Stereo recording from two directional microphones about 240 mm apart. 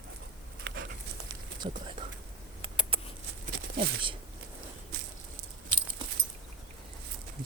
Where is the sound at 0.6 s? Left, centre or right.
Right.